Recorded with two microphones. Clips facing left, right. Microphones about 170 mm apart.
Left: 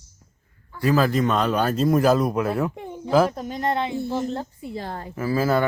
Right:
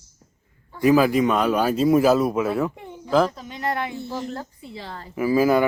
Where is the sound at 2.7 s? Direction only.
25° left (ahead or behind).